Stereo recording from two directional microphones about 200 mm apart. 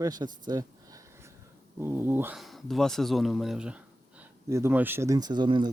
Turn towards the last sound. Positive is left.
turn(degrees=-20)  # may be behind; listen again after turning